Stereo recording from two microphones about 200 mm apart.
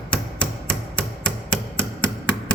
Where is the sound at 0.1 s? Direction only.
5° left (ahead or behind).